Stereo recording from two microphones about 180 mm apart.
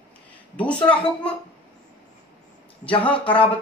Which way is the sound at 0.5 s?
10° left (ahead or behind).